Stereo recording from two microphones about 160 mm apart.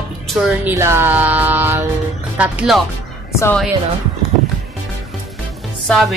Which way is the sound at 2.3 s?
5° right (ahead or behind).